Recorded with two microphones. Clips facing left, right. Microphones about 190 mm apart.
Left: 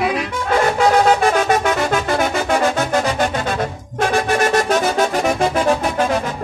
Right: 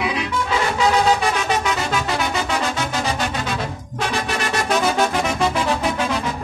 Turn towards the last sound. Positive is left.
turn(degrees=45)  # may be behind; listen again after turning